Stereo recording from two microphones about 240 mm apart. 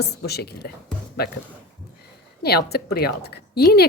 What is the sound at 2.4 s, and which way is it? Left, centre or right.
A woman's voice, left.